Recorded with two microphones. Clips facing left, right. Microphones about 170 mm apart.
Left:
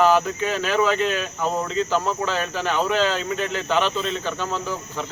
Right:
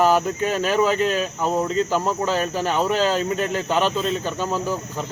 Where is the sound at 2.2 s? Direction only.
40° right (ahead or behind).